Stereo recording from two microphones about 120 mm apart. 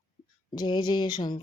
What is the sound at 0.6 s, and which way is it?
Speech, 35° left (ahead or behind).